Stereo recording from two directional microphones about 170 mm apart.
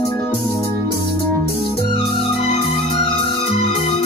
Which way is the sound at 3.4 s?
35° left (ahead or behind).